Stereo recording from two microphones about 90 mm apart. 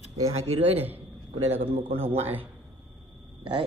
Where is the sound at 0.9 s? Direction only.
90° right.